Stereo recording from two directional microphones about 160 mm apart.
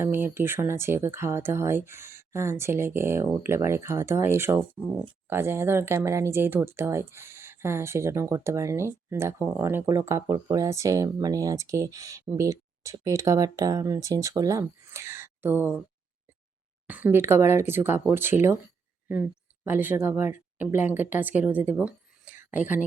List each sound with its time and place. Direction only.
0.0 s speech: 15° right (ahead or behind)
16.8 s speech: 10° right (ahead or behind)
19.6 s speech: 10° right (ahead or behind)